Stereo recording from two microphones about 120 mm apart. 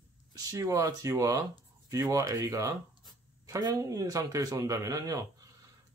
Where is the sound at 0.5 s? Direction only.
25° right (ahead or behind).